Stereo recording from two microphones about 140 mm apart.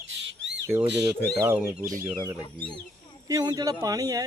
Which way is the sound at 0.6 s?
20° right (ahead or behind).